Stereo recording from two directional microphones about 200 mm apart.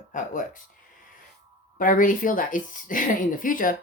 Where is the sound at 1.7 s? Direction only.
45° left (ahead or behind).